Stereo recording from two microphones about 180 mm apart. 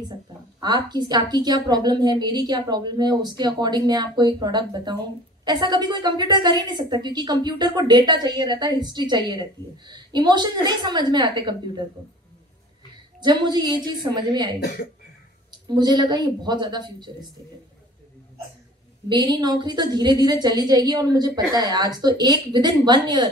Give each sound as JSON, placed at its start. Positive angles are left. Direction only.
{"t": 0.6, "sound": "a woman's voice", "side_deg": -25}
{"t": 13.2, "sound": "a woman's voice", "side_deg": -25}
{"t": 14.6, "sound": "speech", "side_deg": 65}
{"t": 15.7, "sound": "a woman's voice", "side_deg": -25}
{"t": 19.0, "sound": "a woman's voice", "side_deg": -25}